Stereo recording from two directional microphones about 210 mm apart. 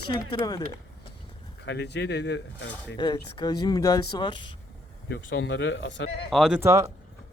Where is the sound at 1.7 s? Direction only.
55° left (ahead or behind).